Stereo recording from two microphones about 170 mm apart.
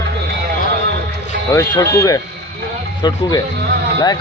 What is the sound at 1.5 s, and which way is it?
Speech, 20° left (ahead or behind).